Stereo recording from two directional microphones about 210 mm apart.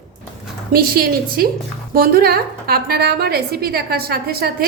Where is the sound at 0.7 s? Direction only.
45° right (ahead or behind).